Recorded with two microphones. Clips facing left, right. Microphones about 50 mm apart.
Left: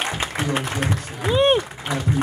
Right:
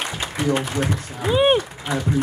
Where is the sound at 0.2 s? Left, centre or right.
Left.